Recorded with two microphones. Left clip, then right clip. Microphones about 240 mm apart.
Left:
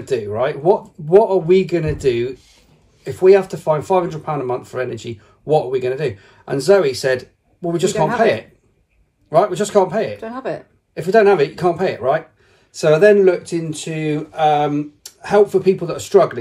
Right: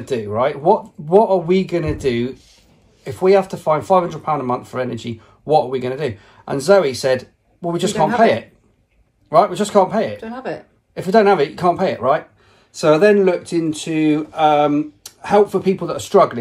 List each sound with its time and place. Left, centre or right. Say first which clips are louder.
0.1 s speech: even; centre
2.3 s a sound: left 3 dB; left
3.3 s speech: left 2 dB; centre
9.3 s speech: right 1 dB; centre
10.2 s speech: left 2 dB; centre
11.0 s speech: left 1 dB; centre